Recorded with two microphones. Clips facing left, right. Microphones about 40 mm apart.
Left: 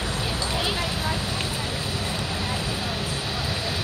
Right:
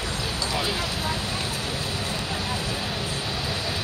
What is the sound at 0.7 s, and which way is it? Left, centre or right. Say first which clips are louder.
Vehicle: left 1 dB; centre.